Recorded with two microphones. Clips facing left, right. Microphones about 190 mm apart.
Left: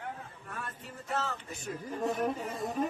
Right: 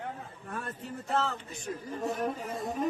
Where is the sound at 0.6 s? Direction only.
30° right (ahead or behind).